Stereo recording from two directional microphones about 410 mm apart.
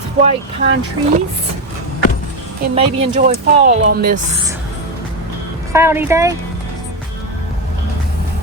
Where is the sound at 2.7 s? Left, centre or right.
Centre.